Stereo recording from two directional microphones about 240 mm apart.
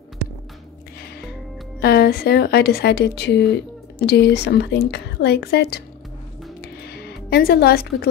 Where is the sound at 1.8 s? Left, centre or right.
Left.